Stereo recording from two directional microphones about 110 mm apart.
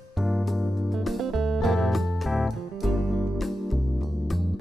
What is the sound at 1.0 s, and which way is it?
Music, centre (ahead or behind).